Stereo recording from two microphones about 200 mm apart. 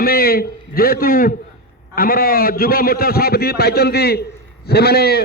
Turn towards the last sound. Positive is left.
turn(degrees=50)  # may be behind; listen again after turning